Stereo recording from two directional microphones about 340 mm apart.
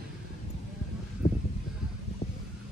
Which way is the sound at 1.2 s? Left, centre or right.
Left.